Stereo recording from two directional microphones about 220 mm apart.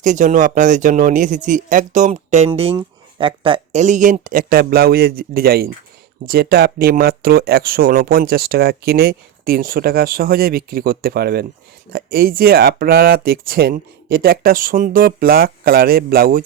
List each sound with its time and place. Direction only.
0.0 s speech: 35° right (ahead or behind)